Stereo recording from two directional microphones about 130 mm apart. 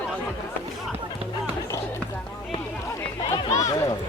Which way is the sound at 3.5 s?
25° left (ahead or behind).